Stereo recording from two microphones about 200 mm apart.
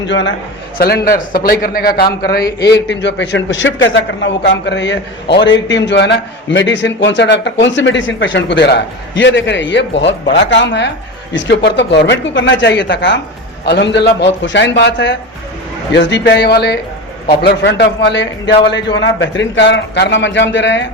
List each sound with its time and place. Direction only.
0.0 s a man's voice: 65° left (ahead or behind)
0.8 s a man's voice: 50° left (ahead or behind)